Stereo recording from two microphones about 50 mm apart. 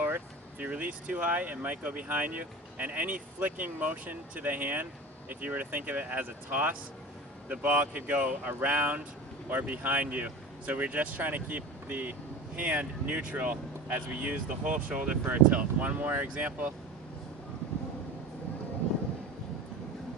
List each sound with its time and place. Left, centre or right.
0.6 s speech: right
16.3 s speech: right